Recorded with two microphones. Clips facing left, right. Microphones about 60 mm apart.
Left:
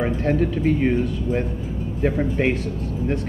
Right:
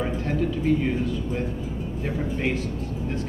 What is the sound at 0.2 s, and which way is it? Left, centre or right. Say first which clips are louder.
Speech: left 5 dB; left.